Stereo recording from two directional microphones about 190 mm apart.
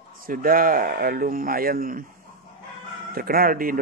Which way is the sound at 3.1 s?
50° right (ahead or behind).